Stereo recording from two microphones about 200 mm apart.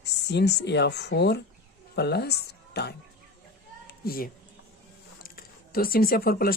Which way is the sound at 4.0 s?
50° left (ahead or behind).